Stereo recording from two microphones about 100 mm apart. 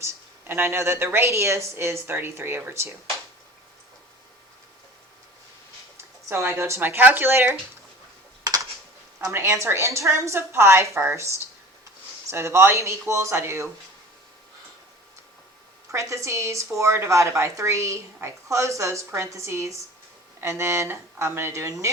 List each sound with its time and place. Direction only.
0.0 s a woman's voice: 25° right (ahead or behind)
6.2 s a woman's voice: 25° right (ahead or behind)
9.3 s a woman's voice: 30° right (ahead or behind)
15.9 s a woman's voice: 30° right (ahead or behind)